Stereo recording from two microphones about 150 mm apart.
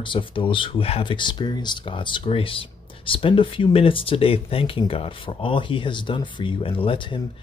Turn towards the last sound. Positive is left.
turn(degrees=35)  # may be behind; listen again after turning